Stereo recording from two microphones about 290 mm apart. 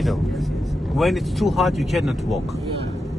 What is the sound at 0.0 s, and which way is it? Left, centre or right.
Speech, centre.